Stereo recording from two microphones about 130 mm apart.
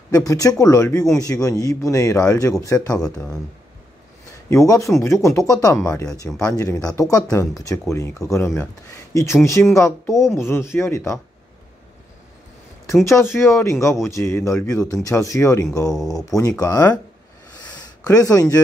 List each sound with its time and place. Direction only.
0.1 s speech: 25° left (ahead or behind)
4.5 s speech: 25° left (ahead or behind)
13.2 s speech: 20° left (ahead or behind)
17.6 s a sound: 30° left (ahead or behind)